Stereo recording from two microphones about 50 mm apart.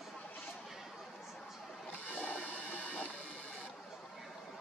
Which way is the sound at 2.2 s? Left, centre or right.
Left.